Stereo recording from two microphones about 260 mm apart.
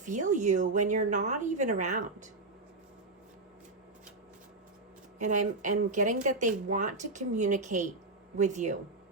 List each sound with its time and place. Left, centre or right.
0.0 s speech: right
5.2 s speech: right